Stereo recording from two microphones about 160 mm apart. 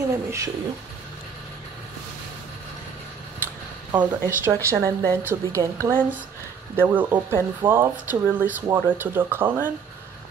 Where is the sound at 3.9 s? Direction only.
15° right (ahead or behind).